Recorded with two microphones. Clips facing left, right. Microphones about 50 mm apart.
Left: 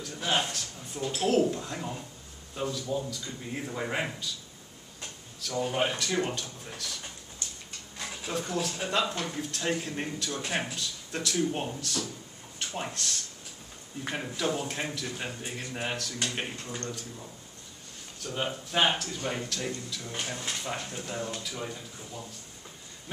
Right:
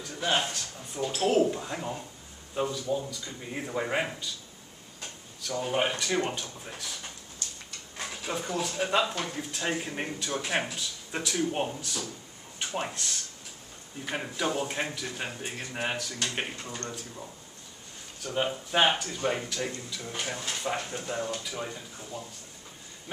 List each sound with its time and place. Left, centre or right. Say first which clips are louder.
0.0 s a man's voice: right 1 dB; centre
5.4 s speech: even; centre
8.0 s speech: even; centre
14.1 s speech: right 1 dB; centre
18.2 s speech: right 3 dB; centre